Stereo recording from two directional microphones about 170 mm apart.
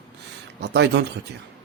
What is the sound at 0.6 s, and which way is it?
Speech, 85° right.